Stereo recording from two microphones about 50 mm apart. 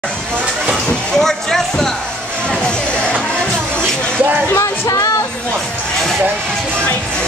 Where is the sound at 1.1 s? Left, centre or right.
Centre.